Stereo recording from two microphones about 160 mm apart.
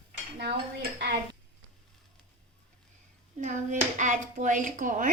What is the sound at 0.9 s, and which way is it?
Dishes, 90° right.